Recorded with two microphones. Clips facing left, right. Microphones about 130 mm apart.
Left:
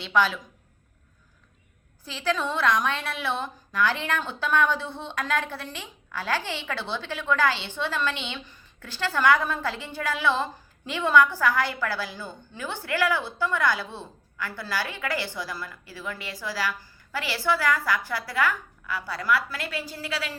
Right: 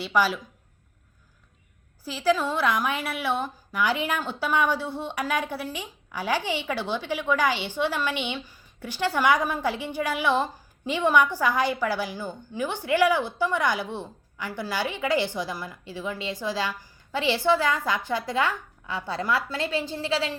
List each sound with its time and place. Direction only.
0.0 s a woman's voice: 5° right (ahead or behind)
2.0 s a woman's voice: 5° right (ahead or behind); by 20.3 s 25° right (ahead or behind)